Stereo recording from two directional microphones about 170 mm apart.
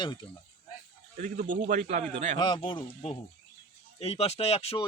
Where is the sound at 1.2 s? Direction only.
50° right (ahead or behind).